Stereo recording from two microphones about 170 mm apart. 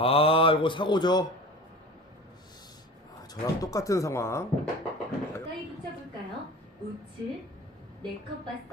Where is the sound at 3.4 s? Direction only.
20° left (ahead or behind).